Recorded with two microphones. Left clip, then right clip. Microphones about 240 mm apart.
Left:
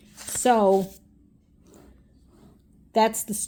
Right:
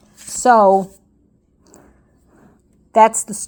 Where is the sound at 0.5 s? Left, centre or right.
Right.